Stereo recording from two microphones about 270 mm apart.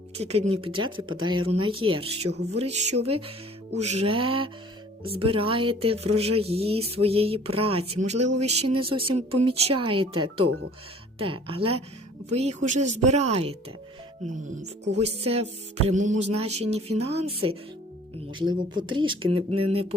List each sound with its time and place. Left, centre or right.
0.2 s speech: right
2.3 s music: right
2.6 s speech: right
14.9 s speech: right